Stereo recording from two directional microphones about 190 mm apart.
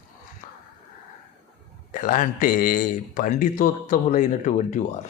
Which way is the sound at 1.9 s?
40° left (ahead or behind).